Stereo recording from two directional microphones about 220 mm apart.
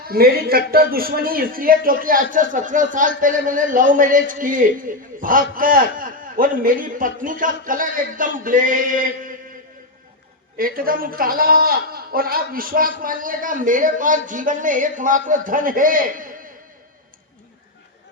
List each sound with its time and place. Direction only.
0.0 s a man's voice: 45° right (ahead or behind)
10.6 s a man's voice: 40° right (ahead or behind)